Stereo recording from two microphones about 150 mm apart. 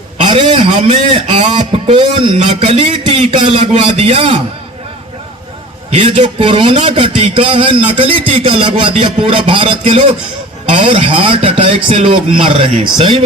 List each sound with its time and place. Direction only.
0.2 s a man's voice: 40° right (ahead or behind)
5.9 s a man's voice: 40° right (ahead or behind)